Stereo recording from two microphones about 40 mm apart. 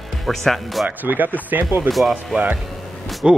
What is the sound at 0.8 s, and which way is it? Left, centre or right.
Speech, right.